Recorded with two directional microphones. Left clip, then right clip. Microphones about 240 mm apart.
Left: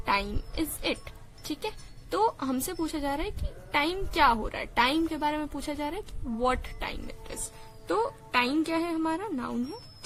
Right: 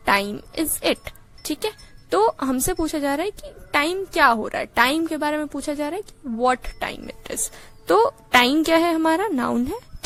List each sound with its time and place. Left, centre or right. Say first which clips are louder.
0.0 s a woman's voice: right 8 dB; right